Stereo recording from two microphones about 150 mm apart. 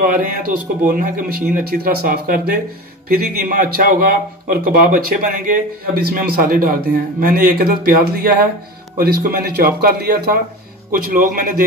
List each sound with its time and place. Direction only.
0.8 s speech: 70° right (ahead or behind)
3.1 s a man's voice: 90° right
10.9 s speech: 80° right